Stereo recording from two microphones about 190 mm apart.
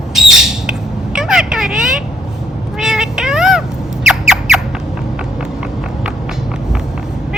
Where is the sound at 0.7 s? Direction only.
5° right (ahead or behind).